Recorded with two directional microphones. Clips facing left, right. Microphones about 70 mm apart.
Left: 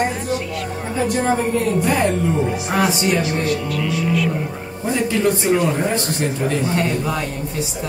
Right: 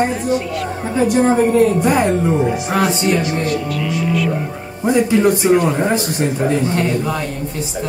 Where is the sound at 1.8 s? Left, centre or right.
Centre.